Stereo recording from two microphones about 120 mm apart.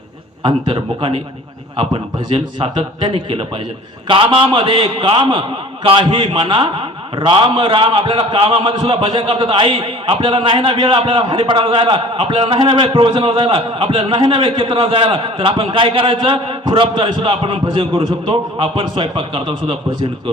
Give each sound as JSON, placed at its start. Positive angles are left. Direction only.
{"t": 0.4, "sound": "a man's voice", "side_deg": -45}